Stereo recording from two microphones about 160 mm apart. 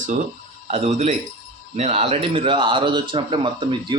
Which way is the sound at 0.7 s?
45° right (ahead or behind).